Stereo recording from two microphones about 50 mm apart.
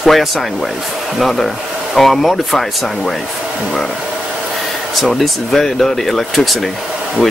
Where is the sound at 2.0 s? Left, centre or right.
Centre.